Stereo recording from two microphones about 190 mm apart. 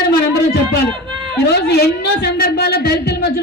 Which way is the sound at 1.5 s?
60° left (ahead or behind).